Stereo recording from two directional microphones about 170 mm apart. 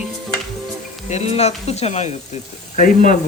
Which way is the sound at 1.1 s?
40° left (ahead or behind).